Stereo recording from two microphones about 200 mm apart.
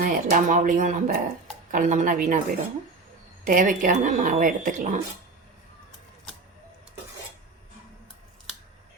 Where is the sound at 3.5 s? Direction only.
40° right (ahead or behind).